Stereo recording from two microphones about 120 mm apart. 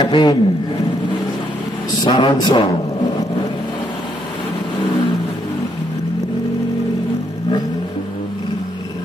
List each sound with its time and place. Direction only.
0.0 s a man's voice: 40° left (ahead or behind)
2.0 s a man's voice: 45° left (ahead or behind)